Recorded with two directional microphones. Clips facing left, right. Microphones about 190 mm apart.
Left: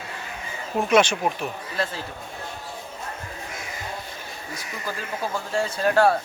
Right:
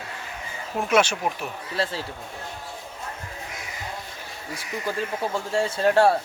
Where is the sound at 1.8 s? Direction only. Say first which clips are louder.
Right 1 dB; 30° right (ahead or behind).